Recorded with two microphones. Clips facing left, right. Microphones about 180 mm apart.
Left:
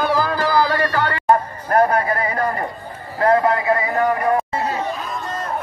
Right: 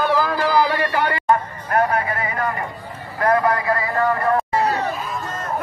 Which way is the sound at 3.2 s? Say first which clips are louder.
Left 2 dB; 25° left (ahead or behind).